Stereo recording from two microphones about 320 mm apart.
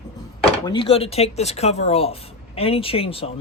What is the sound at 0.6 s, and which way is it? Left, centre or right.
Speech, centre.